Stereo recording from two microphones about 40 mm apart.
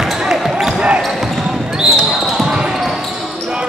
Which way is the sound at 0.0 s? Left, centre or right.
Centre.